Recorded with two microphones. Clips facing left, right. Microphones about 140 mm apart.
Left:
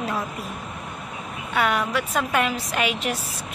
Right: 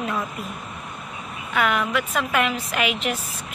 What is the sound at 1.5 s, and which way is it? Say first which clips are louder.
A woman's voice: even; 35° left (ahead or behind).